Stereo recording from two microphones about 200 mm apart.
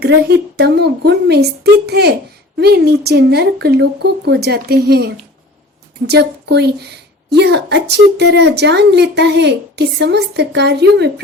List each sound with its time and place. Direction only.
0.0 s speech: 55° right (ahead or behind)